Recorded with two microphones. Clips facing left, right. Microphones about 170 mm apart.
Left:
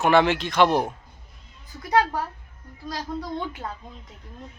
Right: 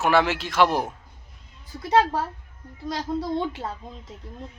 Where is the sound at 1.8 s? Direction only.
25° right (ahead or behind).